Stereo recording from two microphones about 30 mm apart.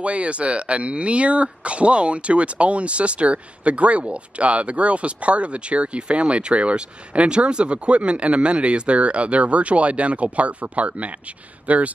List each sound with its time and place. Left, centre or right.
0.0 s speech: right